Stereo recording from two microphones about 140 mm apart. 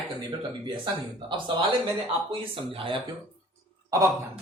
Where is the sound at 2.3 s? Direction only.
40° right (ahead or behind).